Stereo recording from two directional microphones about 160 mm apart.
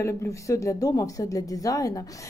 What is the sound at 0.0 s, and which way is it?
A woman's voice, 20° left (ahead or behind).